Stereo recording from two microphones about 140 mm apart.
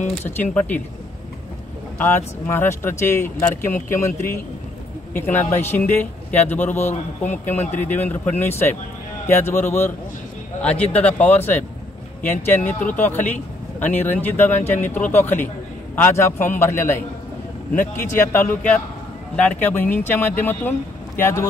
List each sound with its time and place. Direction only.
0.4 s speech: 10° left (ahead or behind)
2.0 s speech: 15° left (ahead or behind)